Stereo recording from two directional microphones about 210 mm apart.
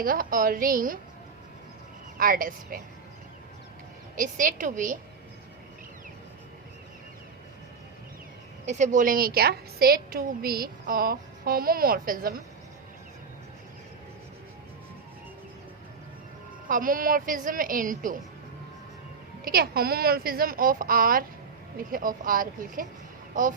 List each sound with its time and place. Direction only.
0.0 s a woman's voice: 40° right (ahead or behind)
2.1 s a woman's voice: 40° right (ahead or behind)
4.1 s a woman's voice: 40° right (ahead or behind)
8.6 s a woman's voice: 35° right (ahead or behind)
16.6 s a woman's voice: 40° right (ahead or behind)
19.5 s a woman's voice: 45° right (ahead or behind)